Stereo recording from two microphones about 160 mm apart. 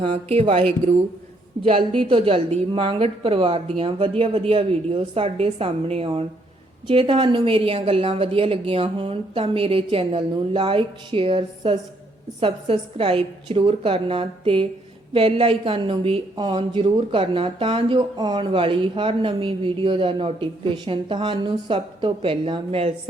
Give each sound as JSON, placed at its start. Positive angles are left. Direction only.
{"t": 0.0, "sound": "a woman's voice", "side_deg": -35}